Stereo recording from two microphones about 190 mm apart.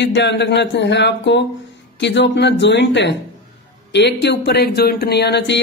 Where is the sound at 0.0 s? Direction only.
65° left (ahead or behind).